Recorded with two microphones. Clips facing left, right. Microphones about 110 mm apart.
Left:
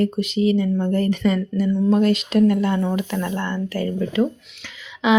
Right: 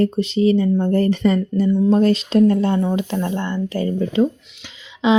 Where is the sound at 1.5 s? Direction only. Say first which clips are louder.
Right 3 dB; 20° right (ahead or behind).